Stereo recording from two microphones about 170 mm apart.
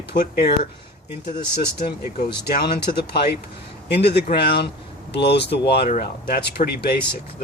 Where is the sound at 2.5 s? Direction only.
70° left (ahead or behind).